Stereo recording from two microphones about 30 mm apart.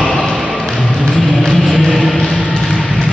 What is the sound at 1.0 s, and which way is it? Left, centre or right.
Music, centre.